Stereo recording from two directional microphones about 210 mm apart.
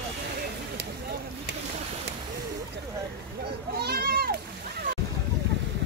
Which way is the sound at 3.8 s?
45° right (ahead or behind).